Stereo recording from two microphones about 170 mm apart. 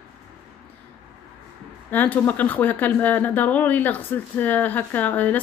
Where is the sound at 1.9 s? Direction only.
10° left (ahead or behind).